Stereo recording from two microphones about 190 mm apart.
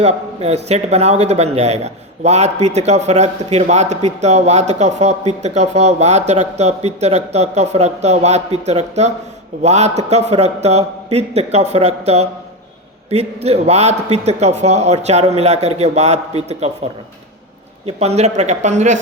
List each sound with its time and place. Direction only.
0.0 s a man's voice: 35° right (ahead or behind)
17.8 s a man's voice: 35° right (ahead or behind)